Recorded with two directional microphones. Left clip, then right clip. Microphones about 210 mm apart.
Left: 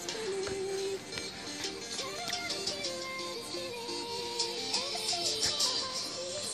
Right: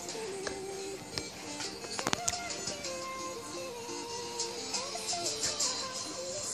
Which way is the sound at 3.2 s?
55° left (ahead or behind).